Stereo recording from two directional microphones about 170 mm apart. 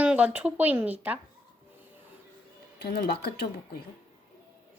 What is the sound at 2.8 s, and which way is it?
Speech, 65° left (ahead or behind).